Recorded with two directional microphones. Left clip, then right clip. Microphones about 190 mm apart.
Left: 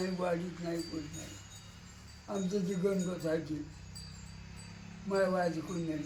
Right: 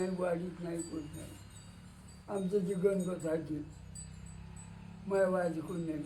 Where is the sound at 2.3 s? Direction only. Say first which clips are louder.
Even; centre (ahead or behind).